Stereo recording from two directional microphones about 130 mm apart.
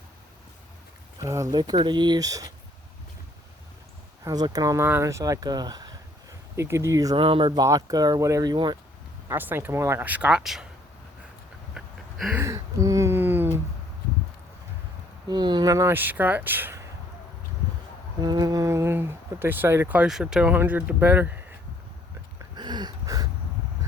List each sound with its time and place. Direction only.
1.2 s speech: 25° right (ahead or behind)
4.2 s speech: 30° right (ahead or behind)
7.2 s speech: 40° right (ahead or behind)
7.6 s speech: 25° right (ahead or behind)
9.3 s speech: 15° right (ahead or behind)
11.7 s a sound: centre (ahead or behind)
12.4 s a sound: 25° right (ahead or behind)
15.3 s speech: 35° right (ahead or behind); by 16.8 s 15° right (ahead or behind)
18.2 s speech: 30° right (ahead or behind); by 20.1 s 15° right (ahead or behind)
20.1 s speech: 5° right (ahead or behind)
22.4 s a sound: 35° right (ahead or behind)